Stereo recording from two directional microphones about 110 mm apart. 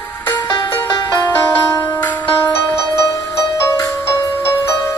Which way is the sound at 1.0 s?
30° left (ahead or behind).